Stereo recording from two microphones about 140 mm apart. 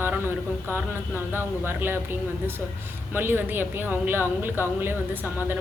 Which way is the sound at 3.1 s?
15° right (ahead or behind).